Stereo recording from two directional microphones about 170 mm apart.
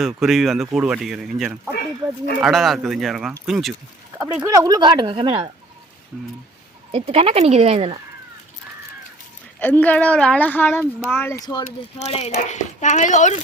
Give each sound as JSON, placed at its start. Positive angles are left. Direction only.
{"t": 0.0, "sound": "speech", "side_deg": 0}
{"t": 4.4, "sound": "speech", "side_deg": -20}
{"t": 6.9, "sound": "speech", "side_deg": -35}
{"t": 9.6, "sound": "speech", "side_deg": 10}
{"t": 11.3, "sound": "speech", "side_deg": 25}
{"t": 11.9, "sound": "speech", "side_deg": 40}